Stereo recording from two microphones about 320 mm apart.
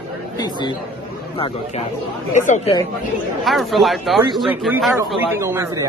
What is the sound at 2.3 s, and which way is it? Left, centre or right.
Speech, left.